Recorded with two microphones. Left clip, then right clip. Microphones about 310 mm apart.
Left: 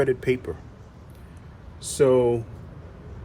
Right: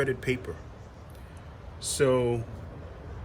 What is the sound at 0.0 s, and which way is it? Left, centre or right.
Speech, centre.